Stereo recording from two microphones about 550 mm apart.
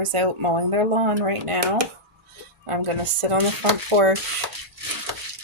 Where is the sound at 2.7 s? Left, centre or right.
Right.